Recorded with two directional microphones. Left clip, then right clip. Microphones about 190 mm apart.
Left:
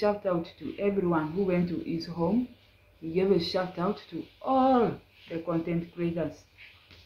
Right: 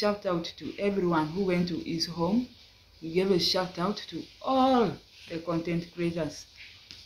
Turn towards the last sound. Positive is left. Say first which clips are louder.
# even
turn(degrees=-10)  # may be behind; listen again after turning